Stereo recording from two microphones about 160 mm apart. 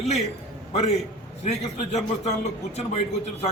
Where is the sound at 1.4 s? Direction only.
40° left (ahead or behind).